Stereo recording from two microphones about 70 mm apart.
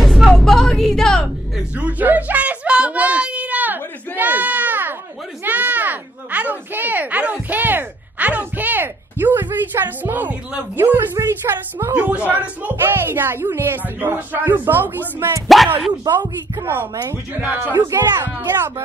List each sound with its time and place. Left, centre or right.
0.0 s music: centre
1.8 s a sound: right
11.9 s speech: right
12.9 s speech: right
15.4 s speech: centre
17.9 s speech: right